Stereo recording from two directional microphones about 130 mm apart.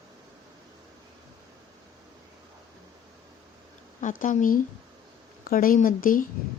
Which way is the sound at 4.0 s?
80° left.